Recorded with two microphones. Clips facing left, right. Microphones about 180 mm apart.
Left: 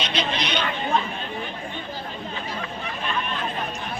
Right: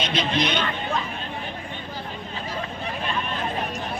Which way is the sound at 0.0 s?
50° right (ahead or behind).